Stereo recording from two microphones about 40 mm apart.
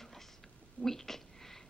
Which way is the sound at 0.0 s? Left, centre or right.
Centre.